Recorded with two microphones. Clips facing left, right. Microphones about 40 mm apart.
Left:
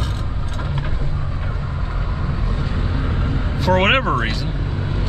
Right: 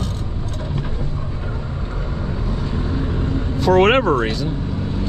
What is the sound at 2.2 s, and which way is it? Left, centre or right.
Vehicle, centre.